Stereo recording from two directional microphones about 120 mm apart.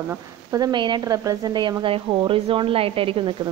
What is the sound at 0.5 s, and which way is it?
Speech, 35° right (ahead or behind).